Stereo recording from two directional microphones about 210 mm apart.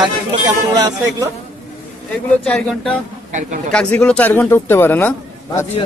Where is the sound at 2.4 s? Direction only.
5° left (ahead or behind).